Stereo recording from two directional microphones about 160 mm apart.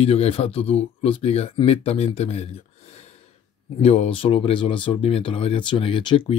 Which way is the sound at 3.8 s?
40° left (ahead or behind).